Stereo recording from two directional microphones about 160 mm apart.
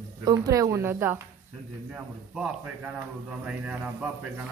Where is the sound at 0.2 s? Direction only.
25° right (ahead or behind); by 4.5 s 10° right (ahead or behind).